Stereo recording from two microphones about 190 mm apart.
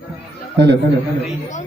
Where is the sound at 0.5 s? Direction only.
65° right (ahead or behind).